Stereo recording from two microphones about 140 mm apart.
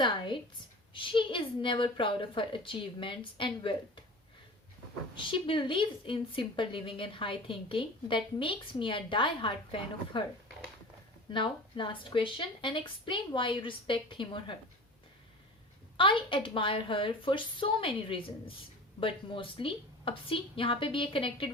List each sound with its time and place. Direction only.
0.9 s a woman's voice: 40° left (ahead or behind)
5.1 s a woman's voice: 35° left (ahead or behind)
11.3 s a woman's voice: 35° left (ahead or behind)
16.0 s a woman's voice: 35° left (ahead or behind)